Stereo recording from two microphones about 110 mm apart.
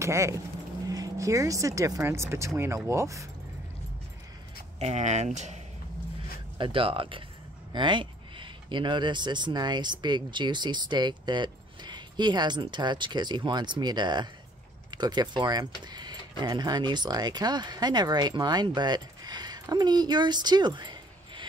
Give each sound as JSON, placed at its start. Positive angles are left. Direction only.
{"t": 0.0, "sound": "speech", "side_deg": -25}
{"t": 4.7, "sound": "speech", "side_deg": -90}
{"t": 6.6, "sound": "speech", "side_deg": -55}